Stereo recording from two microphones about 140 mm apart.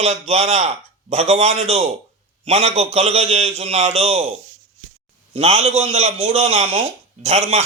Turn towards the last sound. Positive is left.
turn(degrees=-55)  # may be behind; listen again after turning